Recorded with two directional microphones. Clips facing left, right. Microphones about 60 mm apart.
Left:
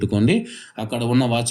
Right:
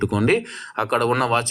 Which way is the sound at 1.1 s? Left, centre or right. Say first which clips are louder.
Even; right.